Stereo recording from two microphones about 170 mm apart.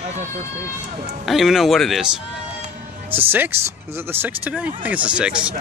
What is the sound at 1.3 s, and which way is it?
Speech, centre (ahead or behind).